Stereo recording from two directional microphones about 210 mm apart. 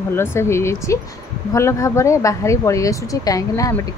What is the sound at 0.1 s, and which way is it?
Speech, 10° left (ahead or behind).